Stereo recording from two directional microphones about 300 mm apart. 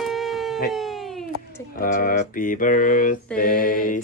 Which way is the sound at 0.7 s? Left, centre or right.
Centre.